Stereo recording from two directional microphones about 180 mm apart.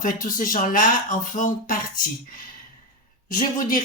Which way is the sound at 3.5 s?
50° left (ahead or behind).